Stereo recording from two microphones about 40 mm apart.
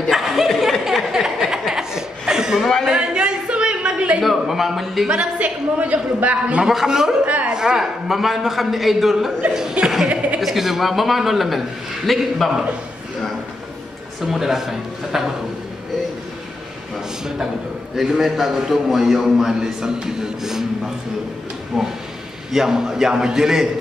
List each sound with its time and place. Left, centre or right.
0.1 s a sound: centre
0.8 s chuckle: centre
3.2 s a sound: right
4.2 s a man's voice: centre
5.0 s a man's voice: right
6.6 s a man's voice: centre
6.9 s a man's voice: centre
14.2 s a man's voice: centre
17.9 s a man's voice: centre